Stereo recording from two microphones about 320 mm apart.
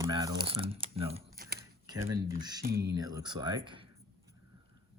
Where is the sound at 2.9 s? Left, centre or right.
Centre.